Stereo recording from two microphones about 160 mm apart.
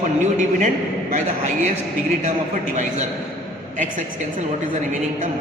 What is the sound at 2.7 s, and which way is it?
Speech, 50° right (ahead or behind).